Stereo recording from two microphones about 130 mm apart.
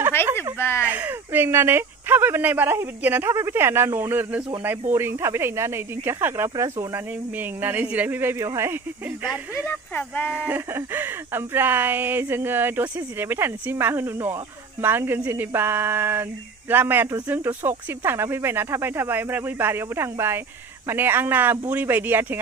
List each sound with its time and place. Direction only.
0.6 s speech: 20° left (ahead or behind)
0.8 s speech: 10° right (ahead or behind)
7.3 s speech: 15° right (ahead or behind)
9.7 s speech: 15° left (ahead or behind)
10.3 s speech: 10° right (ahead or behind)